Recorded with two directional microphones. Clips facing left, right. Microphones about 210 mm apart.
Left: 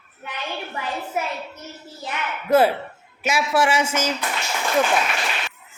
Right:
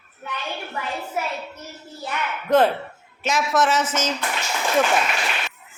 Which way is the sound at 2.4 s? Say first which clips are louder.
Left 1 dB; 10° left (ahead or behind).